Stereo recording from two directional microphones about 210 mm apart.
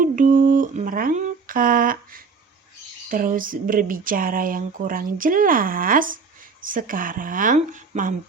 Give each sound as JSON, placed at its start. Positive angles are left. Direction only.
{"t": 0.0, "sound": "speech", "side_deg": -40}